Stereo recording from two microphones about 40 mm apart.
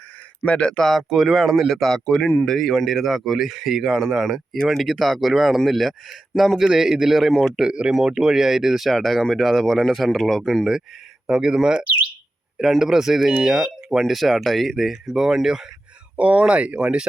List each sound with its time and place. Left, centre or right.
0.4 s speech: left
0.9 s speech: centre
1.7 s speech: centre
6.7 s speech: centre
7.2 s speech: centre
7.6 s speech: right; by 10.7 s centre
11.3 s speech: centre
12.8 s speech: centre
14.0 s speech: centre
15.0 s speech: centre
16.1 s speech: right